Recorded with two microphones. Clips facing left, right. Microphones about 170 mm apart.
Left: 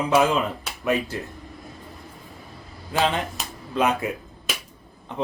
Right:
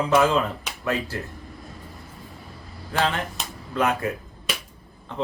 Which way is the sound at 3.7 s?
20° left (ahead or behind).